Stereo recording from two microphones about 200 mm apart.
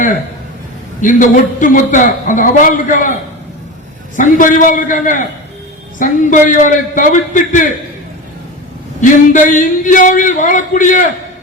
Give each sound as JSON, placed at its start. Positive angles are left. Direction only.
{"t": 1.0, "sound": "speech", "side_deg": 40}
{"t": 4.2, "sound": "speech", "side_deg": 40}
{"t": 9.0, "sound": "speech", "side_deg": 40}